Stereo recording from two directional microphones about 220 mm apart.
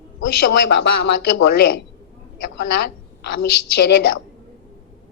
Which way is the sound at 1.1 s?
55° left (ahead or behind).